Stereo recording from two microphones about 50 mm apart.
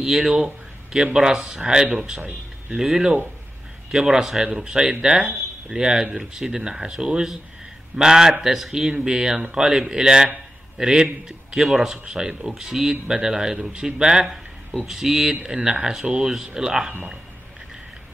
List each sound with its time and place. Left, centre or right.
0.0 s a man's voice: centre
2.8 s a man's voice: centre
14.2 s a sound: centre
14.9 s a man's voice: centre